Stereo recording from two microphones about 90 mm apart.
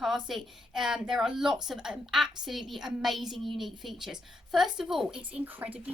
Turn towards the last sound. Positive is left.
turn(degrees=-20)  # may be behind; listen again after turning